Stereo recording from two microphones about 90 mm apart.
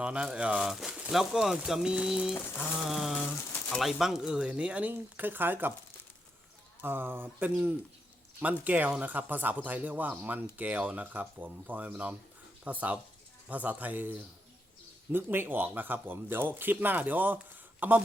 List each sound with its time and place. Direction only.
0.0 s speech: 10° right (ahead or behind)
2.6 s a sound: 5° right (ahead or behind)
3.2 s pigeon: 20° left (ahead or behind)
3.8 s speech: centre (ahead or behind); by 5.7 s 25° right (ahead or behind)
6.8 s speech: 25° right (ahead or behind)